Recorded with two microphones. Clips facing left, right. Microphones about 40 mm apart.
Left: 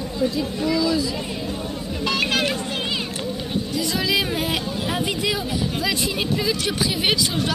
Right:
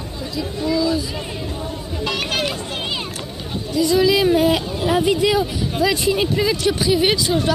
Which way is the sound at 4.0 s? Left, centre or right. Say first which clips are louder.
Right 8 dB; centre.